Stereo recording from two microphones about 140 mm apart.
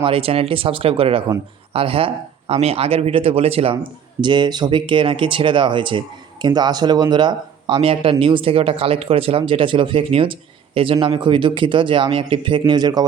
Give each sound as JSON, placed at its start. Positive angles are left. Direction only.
{"t": 0.0, "sound": "speech", "side_deg": -40}
{"t": 4.2, "sound": "speech", "side_deg": -35}